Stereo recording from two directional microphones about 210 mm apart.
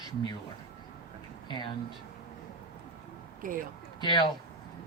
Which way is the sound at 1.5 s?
20° left (ahead or behind).